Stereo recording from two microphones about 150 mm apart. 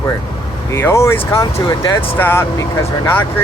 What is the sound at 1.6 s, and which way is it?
Speech, 25° left (ahead or behind).